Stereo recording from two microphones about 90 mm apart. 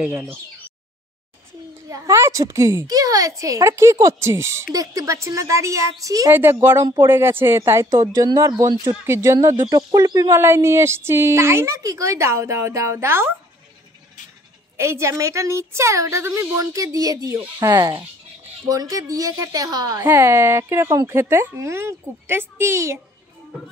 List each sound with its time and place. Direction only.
0.1 s a woman's voice: 25° right (ahead or behind)
1.9 s a woman's voice: 35° right (ahead or behind)
6.3 s a woman's voice: 25° right (ahead or behind); by 10.2 s 45° right (ahead or behind)
10.3 s a woman's voice: 30° right (ahead or behind)
14.8 s a woman's voice: 30° right (ahead or behind); by 20.0 s 50° right (ahead or behind)
20.0 s a woman's voice: 25° right (ahead or behind)